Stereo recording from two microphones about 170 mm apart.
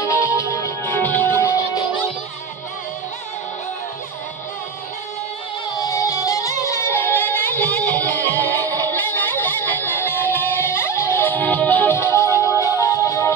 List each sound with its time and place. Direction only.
0.0 s music: 15° left (ahead or behind)
5.8 s music: 20° left (ahead or behind)